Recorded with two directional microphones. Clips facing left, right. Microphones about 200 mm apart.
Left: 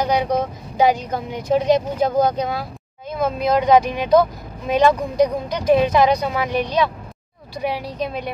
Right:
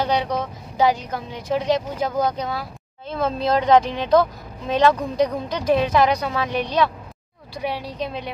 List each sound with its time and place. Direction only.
0.0 s vehicle: 15° left (ahead or behind)
0.7 s speech: 15° left (ahead or behind)